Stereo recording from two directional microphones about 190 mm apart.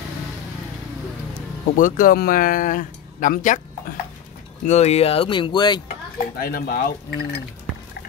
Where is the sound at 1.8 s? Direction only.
45° left (ahead or behind).